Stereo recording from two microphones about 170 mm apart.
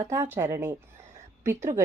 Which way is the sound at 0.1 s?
15° right (ahead or behind).